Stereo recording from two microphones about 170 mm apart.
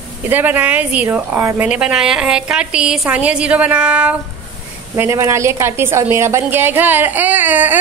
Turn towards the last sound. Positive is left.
turn(degrees=-10)  # may be behind; listen again after turning